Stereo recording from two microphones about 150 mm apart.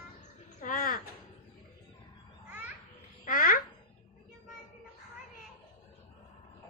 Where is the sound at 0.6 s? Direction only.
65° left (ahead or behind).